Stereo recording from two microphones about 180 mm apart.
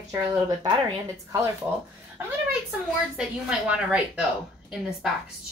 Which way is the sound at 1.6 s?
10° right (ahead or behind).